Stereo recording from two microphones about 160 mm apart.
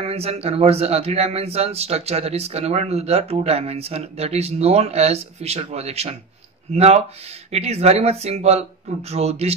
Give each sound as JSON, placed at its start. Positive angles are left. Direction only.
{"t": 0.0, "sound": "speech", "side_deg": -40}